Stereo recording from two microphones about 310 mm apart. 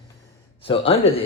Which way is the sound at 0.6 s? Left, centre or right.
Centre.